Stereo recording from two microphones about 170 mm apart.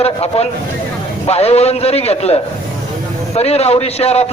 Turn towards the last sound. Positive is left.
turn(degrees=35)  # may be behind; listen again after turning